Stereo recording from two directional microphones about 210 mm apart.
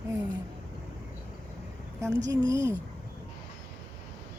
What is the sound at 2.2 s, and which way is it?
Speech, 15° right (ahead or behind).